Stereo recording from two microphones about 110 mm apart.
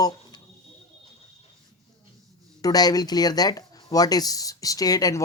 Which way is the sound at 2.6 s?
35° left (ahead or behind).